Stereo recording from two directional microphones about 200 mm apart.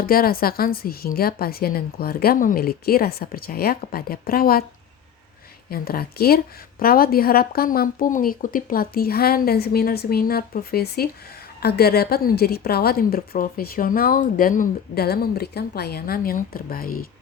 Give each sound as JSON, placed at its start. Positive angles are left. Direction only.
{"t": 0.0, "sound": "a woman's voice", "side_deg": 45}
{"t": 5.7, "sound": "a woman's voice", "side_deg": 50}